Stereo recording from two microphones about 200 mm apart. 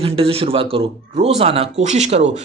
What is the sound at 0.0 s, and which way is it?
Speech, 30° right (ahead or behind).